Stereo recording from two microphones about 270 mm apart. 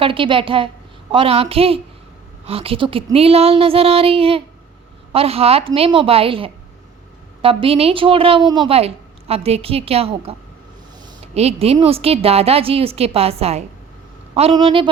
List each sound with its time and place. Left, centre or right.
0.0 s a woman's voice: centre